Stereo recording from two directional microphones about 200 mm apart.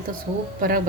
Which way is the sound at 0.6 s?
45° right (ahead or behind).